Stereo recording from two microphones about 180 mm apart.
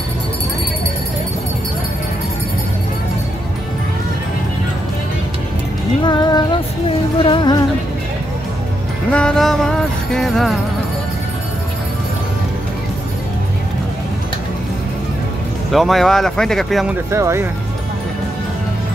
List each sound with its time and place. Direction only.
6.0 s music: 25° left (ahead or behind)
9.1 s music: 5° left (ahead or behind)
15.7 s speech: centre (ahead or behind)
17.1 s speech: 15° right (ahead or behind)